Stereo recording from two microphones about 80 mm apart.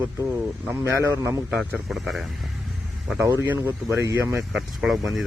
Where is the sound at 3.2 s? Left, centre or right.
Right.